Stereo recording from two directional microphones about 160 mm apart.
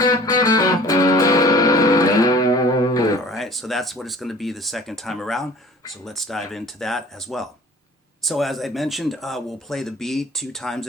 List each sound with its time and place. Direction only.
0.0 s music: 25° left (ahead or behind)
3.2 s speech: centre (ahead or behind)